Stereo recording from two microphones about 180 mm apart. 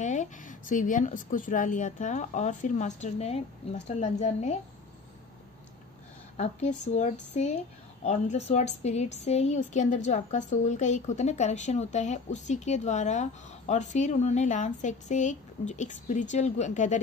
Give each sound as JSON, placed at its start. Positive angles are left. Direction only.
{"t": 0.0, "sound": "a woman's voice", "side_deg": 40}
{"t": 6.3, "sound": "a woman's voice", "side_deg": 40}